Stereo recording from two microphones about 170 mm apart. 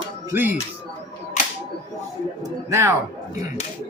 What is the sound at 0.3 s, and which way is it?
Speech, 10° right (ahead or behind).